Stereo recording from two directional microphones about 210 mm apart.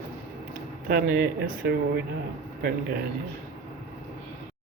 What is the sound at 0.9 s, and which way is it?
Speech, 45° right (ahead or behind).